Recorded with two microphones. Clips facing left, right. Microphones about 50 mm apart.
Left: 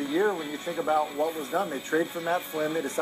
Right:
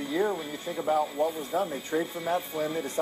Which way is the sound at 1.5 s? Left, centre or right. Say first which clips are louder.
Left 4 dB; left.